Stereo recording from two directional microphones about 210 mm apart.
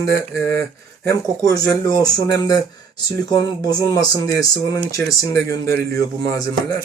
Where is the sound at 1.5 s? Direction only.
15° left (ahead or behind).